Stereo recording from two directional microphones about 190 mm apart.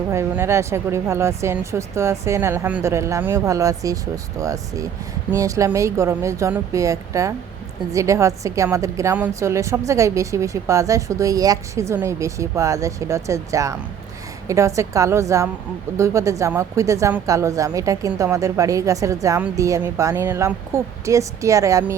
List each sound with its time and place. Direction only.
0.1 s speech: 15° right (ahead or behind)